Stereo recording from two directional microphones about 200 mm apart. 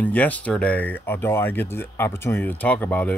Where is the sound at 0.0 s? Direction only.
10° left (ahead or behind).